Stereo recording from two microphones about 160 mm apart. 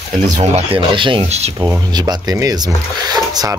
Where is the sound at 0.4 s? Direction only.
30° right (ahead or behind).